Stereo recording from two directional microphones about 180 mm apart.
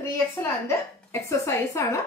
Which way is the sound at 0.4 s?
15° left (ahead or behind).